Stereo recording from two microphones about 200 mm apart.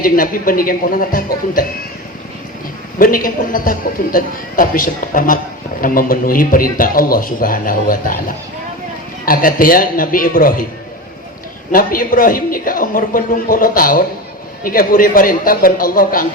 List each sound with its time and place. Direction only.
0.0 s a man's voice: 45° left (ahead or behind)
3.0 s a man's voice: 45° left (ahead or behind)
9.2 s a man's voice: 45° left (ahead or behind)
11.7 s a man's voice: 45° left (ahead or behind)